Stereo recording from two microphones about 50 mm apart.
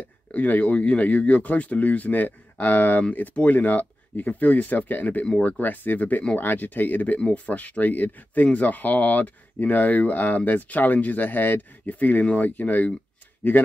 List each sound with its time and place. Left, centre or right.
0.3 s speech: left
7.2 s speech: left